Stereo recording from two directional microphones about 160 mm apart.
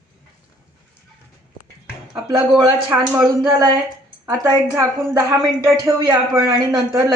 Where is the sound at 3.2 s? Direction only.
25° right (ahead or behind).